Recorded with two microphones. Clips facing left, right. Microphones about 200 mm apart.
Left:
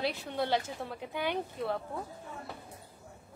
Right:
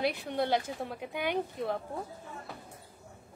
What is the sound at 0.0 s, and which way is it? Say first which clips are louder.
Speech: right 3 dB; 55° right (ahead or behind).